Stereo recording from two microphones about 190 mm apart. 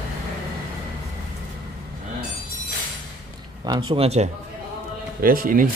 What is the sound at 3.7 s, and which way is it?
Speech, 25° right (ahead or behind).